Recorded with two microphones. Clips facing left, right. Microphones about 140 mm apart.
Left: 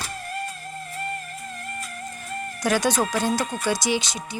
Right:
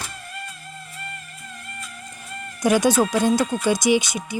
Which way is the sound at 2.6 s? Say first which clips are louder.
Right 5 dB; 15° right (ahead or behind).